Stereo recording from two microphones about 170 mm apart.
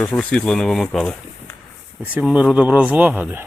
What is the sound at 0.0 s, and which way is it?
Speech, 10° left (ahead or behind).